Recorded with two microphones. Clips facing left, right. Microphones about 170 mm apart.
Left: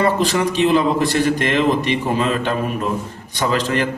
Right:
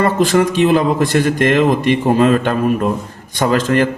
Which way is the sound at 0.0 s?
50° right (ahead or behind).